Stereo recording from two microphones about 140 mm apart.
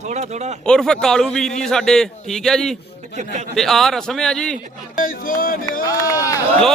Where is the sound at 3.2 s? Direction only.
55° right (ahead or behind).